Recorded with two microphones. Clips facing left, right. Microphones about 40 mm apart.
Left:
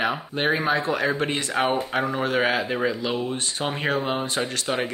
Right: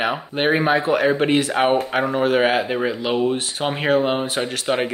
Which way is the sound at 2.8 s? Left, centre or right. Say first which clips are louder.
Right 5 dB; right.